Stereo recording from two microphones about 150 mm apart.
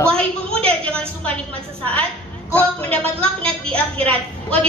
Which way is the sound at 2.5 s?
10° left (ahead or behind).